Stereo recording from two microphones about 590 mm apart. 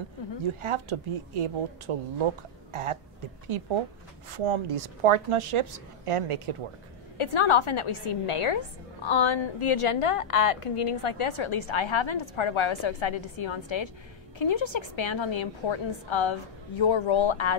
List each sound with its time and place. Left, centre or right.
0.6 s a woman's voice: right
7.2 s a woman's voice: left